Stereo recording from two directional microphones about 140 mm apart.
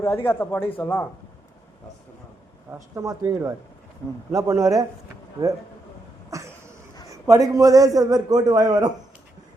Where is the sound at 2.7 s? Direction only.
20° right (ahead or behind).